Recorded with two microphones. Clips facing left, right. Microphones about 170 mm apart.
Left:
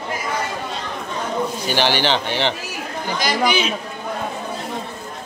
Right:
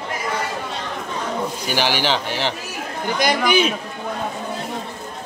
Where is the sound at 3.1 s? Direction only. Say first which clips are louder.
Right 2 dB; 55° right (ahead or behind).